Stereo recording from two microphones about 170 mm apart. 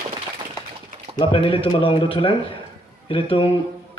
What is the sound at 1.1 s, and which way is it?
A man's voice, 30° left (ahead or behind).